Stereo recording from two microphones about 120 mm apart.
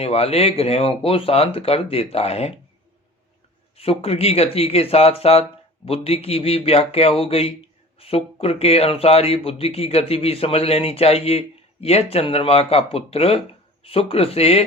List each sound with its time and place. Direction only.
0.0 s speech: 55° left (ahead or behind)
3.8 s speech: 55° left (ahead or behind)